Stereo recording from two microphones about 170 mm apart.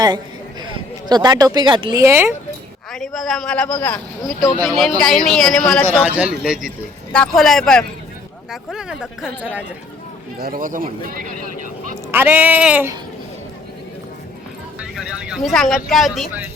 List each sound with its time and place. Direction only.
0.6 s speech: 25° right (ahead or behind)
2.9 s a man's voice: centre (ahead or behind)
6.0 s a man's voice: 10° right (ahead or behind)
10.4 s a man's voice: 55° right (ahead or behind)
12.1 s speech: 10° right (ahead or behind)
14.9 s a man's voice: centre (ahead or behind)